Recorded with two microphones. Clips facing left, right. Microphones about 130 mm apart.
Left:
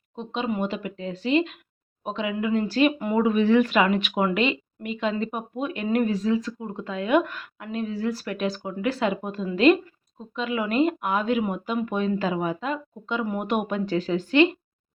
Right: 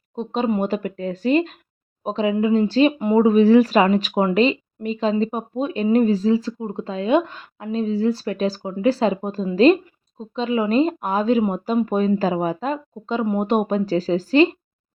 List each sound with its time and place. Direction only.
0.2 s speech: 40° right (ahead or behind)